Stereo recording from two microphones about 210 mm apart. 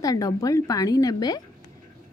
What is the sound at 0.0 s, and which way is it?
A woman's voice, 15° left (ahead or behind).